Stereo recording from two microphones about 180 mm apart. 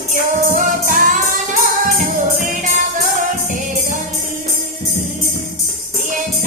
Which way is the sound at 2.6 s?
45° right (ahead or behind).